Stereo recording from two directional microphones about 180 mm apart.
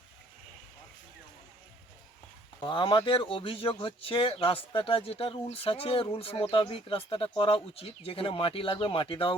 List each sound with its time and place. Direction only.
2.6 s speech: 25° left (ahead or behind)